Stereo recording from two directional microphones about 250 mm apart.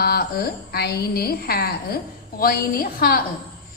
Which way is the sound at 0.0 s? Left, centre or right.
Left.